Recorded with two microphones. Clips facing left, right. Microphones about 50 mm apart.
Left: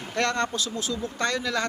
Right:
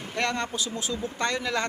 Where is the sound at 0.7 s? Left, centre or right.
Right.